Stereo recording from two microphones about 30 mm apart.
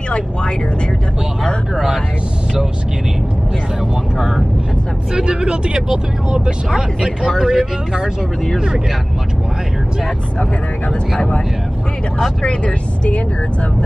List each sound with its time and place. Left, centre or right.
5.1 s speech: right
12.4 s speech: left